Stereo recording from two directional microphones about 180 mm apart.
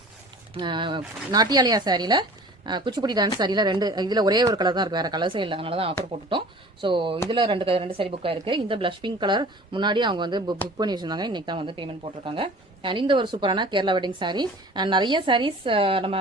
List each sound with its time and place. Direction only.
0.5 s speech: 25° right (ahead or behind)